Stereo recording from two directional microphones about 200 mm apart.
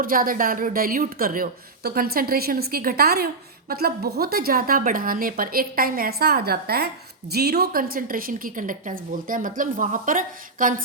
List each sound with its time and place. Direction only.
0.0 s a woman's voice: 45° right (ahead or behind)